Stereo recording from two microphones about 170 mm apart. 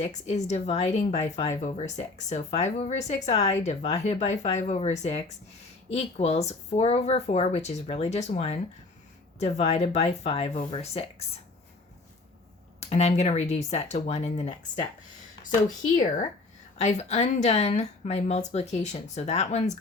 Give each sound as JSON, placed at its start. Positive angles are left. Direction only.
{"t": 0.0, "sound": "speech", "side_deg": 45}
{"t": 12.8, "sound": "speech", "side_deg": 40}
{"t": 16.7, "sound": "speech", "side_deg": 40}